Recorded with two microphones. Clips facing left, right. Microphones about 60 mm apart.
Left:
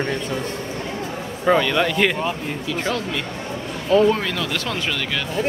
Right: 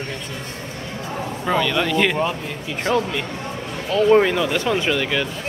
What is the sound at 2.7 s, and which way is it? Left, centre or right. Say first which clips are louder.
Speech: right 4 dB; centre.